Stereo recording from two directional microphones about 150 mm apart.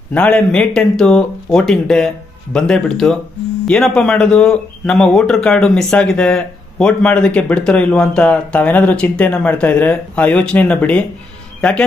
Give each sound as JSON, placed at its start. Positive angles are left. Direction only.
{"t": 0.1, "sound": "a man's voice", "side_deg": 5}